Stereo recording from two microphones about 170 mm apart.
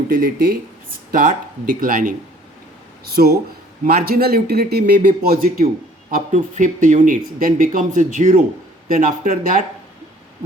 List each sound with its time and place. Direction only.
0.1 s a man's voice: 60° right (ahead or behind)
6.1 s speech: 50° right (ahead or behind)